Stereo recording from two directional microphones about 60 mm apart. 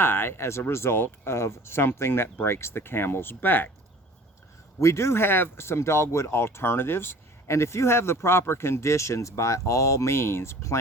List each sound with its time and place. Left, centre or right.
0.0 s speech: left
4.8 s speech: left